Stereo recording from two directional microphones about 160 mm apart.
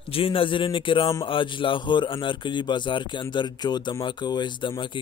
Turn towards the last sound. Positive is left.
turn(degrees=30)  # may be behind; listen again after turning